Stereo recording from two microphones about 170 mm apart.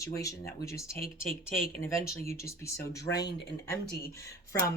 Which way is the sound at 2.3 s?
15° left (ahead or behind).